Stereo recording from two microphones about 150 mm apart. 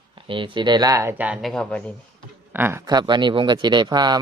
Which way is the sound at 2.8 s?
30° right (ahead or behind).